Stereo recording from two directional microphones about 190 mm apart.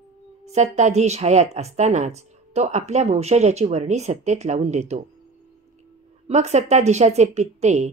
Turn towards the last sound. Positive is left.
turn(degrees=-35)  # may be behind; listen again after turning